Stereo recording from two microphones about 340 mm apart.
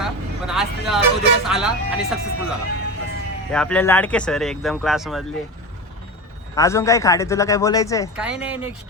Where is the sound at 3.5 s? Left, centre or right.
Centre.